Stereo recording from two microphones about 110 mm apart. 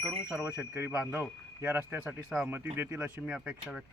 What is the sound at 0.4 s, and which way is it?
Speech, 20° right (ahead or behind).